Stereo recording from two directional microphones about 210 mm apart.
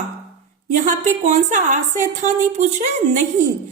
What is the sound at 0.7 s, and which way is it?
A woman's voice, 35° right (ahead or behind).